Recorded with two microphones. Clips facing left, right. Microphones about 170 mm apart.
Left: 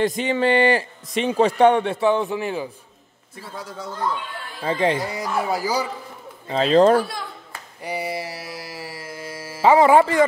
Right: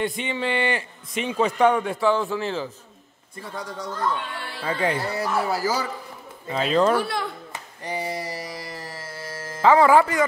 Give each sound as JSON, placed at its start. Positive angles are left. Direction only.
{"t": 0.0, "sound": "a man's voice", "side_deg": 40}
{"t": 3.3, "sound": "a man's voice", "side_deg": 5}
{"t": 4.6, "sound": "a man's voice", "side_deg": 30}
{"t": 4.9, "sound": "speech", "side_deg": 15}
{"t": 6.5, "sound": "speech", "side_deg": 30}
{"t": 7.8, "sound": "carnatic music", "side_deg": 10}